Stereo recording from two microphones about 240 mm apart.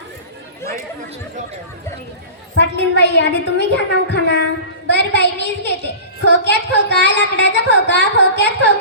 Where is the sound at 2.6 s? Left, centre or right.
Left.